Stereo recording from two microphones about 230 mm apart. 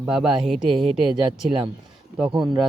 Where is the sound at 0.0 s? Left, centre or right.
Centre.